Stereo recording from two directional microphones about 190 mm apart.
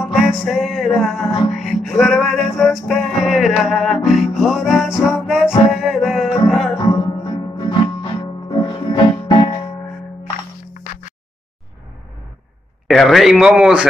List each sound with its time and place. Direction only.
0.0 s music: centre (ahead or behind)
6.9 s music: 20° left (ahead or behind)
10.7 s a sound: 45° left (ahead or behind)
12.8 s speech: centre (ahead or behind)